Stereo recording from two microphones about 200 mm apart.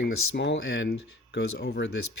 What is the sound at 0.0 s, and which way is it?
Speech, 60° left (ahead or behind).